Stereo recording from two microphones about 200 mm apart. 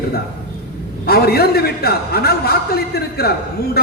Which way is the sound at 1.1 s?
50° left (ahead or behind).